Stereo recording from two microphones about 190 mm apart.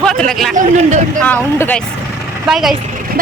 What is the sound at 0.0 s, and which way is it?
Speech, 5° left (ahead or behind).